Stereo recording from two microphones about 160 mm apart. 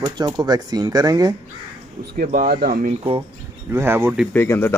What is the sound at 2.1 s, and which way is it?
Speech, 60° right (ahead or behind).